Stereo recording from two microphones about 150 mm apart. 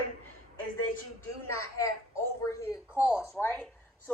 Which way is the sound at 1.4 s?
20° left (ahead or behind).